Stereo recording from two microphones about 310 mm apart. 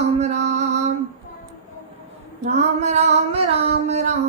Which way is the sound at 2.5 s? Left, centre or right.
Right.